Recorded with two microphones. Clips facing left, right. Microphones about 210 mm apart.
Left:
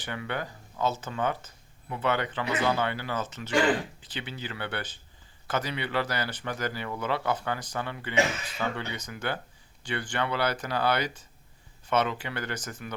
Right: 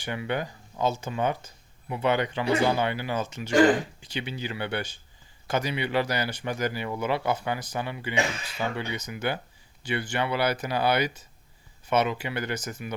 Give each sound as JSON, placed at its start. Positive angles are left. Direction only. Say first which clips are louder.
{"t": 0.0, "sound": "speech", "louder": "right 4 dB", "side_deg": -15}
{"t": 3.5, "sound": "speech", "louder": "right 5 dB", "side_deg": -40}
{"t": 4.0, "sound": "speech", "louder": "right 4 dB", "side_deg": -15}